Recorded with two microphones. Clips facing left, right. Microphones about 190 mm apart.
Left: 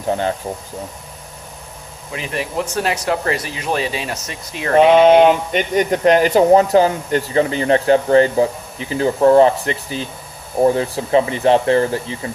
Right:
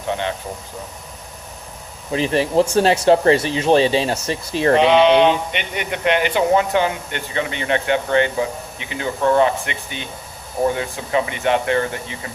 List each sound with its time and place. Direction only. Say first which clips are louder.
0.1 s speech: left 4 dB; 40° left (ahead or behind)
2.1 s speech: right 7 dB; 30° right (ahead or behind)
4.7 s speech: left 4 dB; 45° left (ahead or behind)